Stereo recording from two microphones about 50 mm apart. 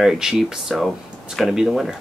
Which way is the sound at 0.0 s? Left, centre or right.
Centre.